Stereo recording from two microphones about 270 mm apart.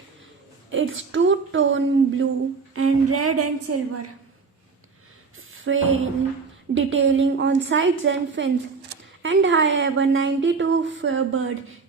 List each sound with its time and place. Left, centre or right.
0.7 s a woman's voice: right
2.7 s a woman's voice: right
5.6 s a woman's voice: right